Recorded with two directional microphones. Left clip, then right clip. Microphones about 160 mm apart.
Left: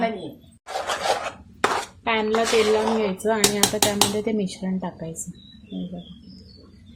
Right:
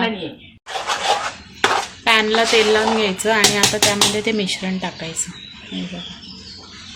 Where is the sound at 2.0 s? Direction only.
Centre (ahead or behind).